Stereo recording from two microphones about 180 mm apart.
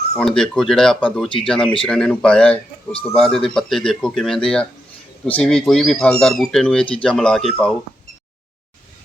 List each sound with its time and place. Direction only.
0.2 s speech: 5° left (ahead or behind)